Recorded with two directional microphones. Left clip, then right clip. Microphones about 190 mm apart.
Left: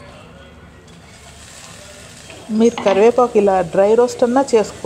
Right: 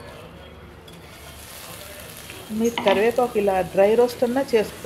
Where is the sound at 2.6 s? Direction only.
45° left (ahead or behind).